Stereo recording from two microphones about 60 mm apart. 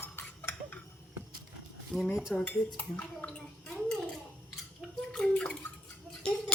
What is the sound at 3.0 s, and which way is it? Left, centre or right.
Speech, left.